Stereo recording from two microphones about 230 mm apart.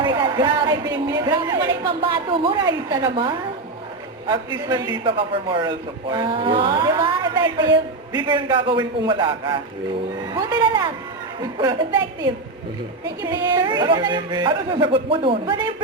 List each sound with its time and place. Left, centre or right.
0.0 s a man's voice: centre